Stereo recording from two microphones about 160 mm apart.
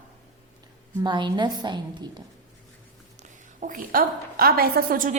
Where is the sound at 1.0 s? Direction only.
30° right (ahead or behind).